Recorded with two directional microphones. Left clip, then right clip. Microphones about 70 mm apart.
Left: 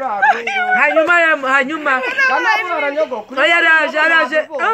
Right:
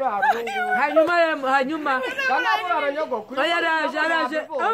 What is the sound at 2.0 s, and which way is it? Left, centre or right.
Speech, left.